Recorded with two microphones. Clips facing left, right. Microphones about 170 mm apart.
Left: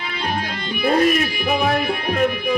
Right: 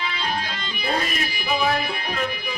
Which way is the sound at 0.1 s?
55° left (ahead or behind).